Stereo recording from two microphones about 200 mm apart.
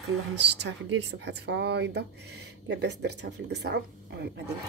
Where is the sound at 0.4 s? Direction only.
60° right (ahead or behind).